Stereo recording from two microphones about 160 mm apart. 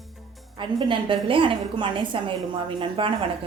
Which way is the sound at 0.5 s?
30° right (ahead or behind).